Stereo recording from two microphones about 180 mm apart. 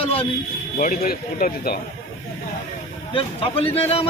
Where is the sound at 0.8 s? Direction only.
50° left (ahead or behind).